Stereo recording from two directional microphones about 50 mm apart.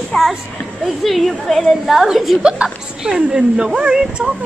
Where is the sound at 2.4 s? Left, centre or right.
Centre.